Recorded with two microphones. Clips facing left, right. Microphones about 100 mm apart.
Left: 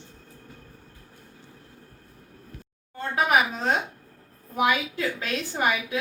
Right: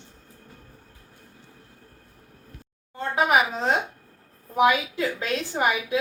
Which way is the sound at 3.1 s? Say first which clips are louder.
Right 1 dB; 20° right (ahead or behind).